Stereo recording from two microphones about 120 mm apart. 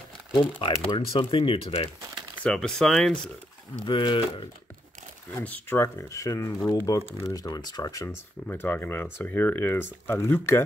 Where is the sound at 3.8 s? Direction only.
45° left (ahead or behind).